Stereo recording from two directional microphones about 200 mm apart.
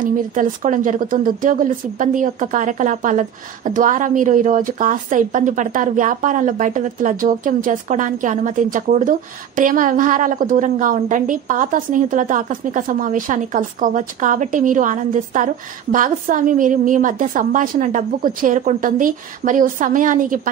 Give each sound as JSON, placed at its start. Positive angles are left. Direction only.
{"t": 0.0, "sound": "a woman's voice", "side_deg": -40}